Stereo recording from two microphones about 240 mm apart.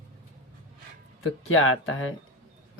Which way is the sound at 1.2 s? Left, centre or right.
Left.